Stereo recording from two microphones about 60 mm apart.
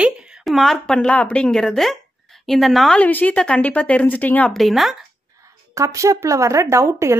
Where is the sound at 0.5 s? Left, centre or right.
Centre.